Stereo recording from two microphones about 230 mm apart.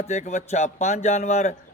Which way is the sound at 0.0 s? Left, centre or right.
Left.